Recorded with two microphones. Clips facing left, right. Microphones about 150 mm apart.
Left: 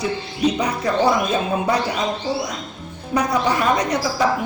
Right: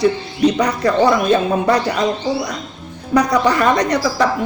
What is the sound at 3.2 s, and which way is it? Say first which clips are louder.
Speech: right 5 dB; 75° right (ahead or behind).